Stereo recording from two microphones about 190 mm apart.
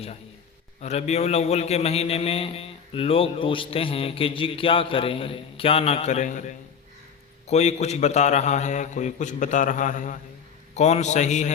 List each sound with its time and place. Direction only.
0.8 s a man's voice: 35° left (ahead or behind)